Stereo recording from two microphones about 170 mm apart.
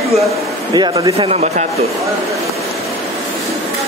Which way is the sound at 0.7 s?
25° right (ahead or behind).